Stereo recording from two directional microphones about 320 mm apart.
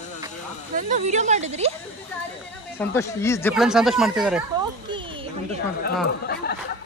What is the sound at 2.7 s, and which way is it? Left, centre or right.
Speech, centre.